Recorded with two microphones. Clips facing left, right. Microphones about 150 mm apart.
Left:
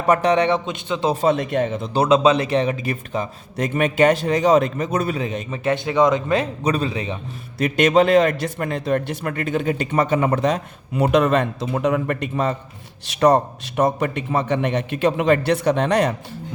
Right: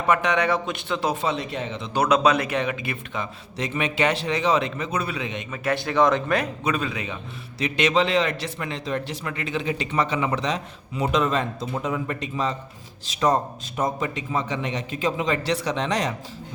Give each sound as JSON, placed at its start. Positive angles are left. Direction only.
{"t": 0.1, "sound": "a man's voice", "side_deg": 35}
{"t": 1.1, "sound": "a man's voice", "side_deg": 50}
{"t": 1.9, "sound": "a man's voice", "side_deg": 25}
{"t": 5.5, "sound": "a man's voice", "side_deg": 20}
{"t": 6.6, "sound": "a man's voice", "side_deg": 35}
{"t": 7.6, "sound": "a man's voice", "side_deg": 50}